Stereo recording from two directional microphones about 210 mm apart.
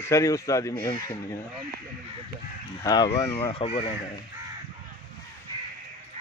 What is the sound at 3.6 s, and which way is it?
Speech, 25° left (ahead or behind).